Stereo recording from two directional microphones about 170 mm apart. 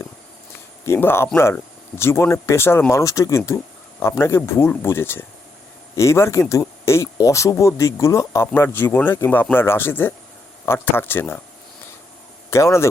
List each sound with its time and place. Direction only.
0.9 s speech: 15° left (ahead or behind)
12.5 s speech: 15° left (ahead or behind)